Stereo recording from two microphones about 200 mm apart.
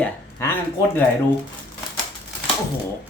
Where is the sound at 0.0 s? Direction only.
10° left (ahead or behind).